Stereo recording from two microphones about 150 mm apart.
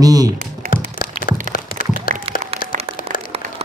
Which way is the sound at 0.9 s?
65° left (ahead or behind).